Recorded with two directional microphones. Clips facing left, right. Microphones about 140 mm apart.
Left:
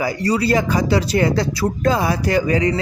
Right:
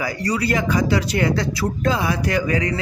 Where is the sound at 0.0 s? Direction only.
30° left (ahead or behind).